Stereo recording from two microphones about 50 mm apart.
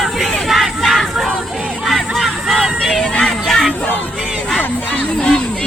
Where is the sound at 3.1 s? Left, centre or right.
Centre.